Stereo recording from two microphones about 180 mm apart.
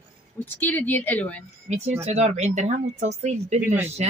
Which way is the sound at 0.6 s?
10° left (ahead or behind).